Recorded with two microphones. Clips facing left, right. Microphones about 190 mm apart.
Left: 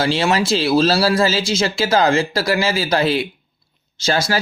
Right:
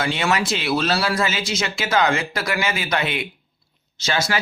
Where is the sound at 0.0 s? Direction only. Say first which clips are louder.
Left 4 dB; 30° left (ahead or behind).